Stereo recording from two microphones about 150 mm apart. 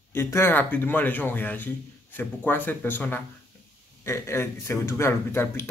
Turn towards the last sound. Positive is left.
turn(degrees=15)  # may be behind; listen again after turning